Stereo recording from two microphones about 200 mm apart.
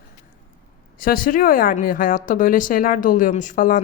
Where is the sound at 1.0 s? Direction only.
45° left (ahead or behind).